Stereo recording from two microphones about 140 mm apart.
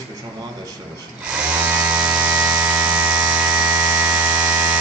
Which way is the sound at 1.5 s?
10° right (ahead or behind).